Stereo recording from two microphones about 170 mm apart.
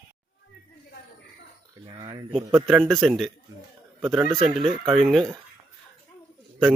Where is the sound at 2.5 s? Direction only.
Centre (ahead or behind).